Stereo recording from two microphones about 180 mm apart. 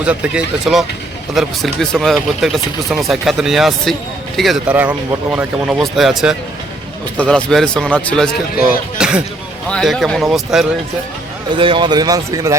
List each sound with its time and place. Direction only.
0.0 s speech: 5° right (ahead or behind)
11.5 s speech: 25° right (ahead or behind)